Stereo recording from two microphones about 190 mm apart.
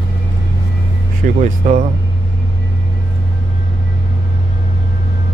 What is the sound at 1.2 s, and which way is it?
Speech, 45° right (ahead or behind).